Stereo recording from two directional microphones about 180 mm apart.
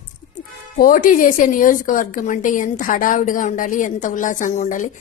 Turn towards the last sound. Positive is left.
turn(degrees=45)  # may be behind; listen again after turning